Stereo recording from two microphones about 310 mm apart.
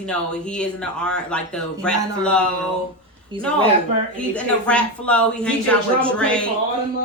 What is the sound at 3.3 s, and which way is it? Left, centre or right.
Speech, centre.